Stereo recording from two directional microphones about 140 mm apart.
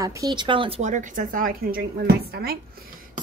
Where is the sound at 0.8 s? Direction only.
60° right (ahead or behind); by 1.8 s 85° right.